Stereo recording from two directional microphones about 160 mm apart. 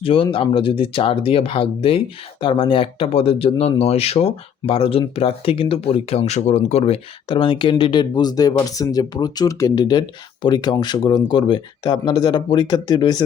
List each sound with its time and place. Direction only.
0.0 s speech: 35° left (ahead or behind)